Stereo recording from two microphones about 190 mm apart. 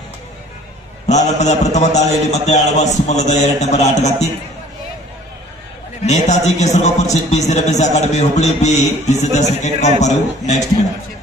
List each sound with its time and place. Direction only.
1.0 s speech: 35° left (ahead or behind)
6.0 s speech: 35° left (ahead or behind)